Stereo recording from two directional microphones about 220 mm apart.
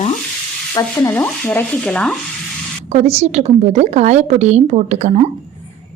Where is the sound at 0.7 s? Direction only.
15° left (ahead or behind).